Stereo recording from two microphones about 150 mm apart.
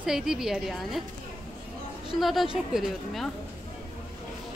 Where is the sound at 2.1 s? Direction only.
Centre (ahead or behind).